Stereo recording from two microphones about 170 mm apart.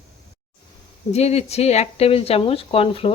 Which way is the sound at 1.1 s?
40° left (ahead or behind).